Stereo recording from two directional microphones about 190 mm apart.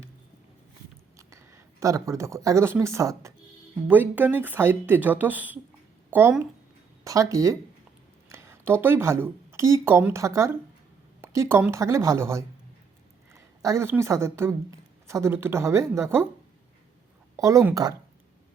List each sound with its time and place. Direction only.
1.3 s a woman's voice: 15° right (ahead or behind)
17.3 s speech: 15° right (ahead or behind)